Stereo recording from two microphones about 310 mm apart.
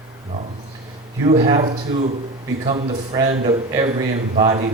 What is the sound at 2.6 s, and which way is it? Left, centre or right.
A man's voice, centre.